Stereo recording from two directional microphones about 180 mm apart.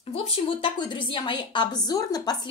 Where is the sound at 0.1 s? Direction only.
30° left (ahead or behind).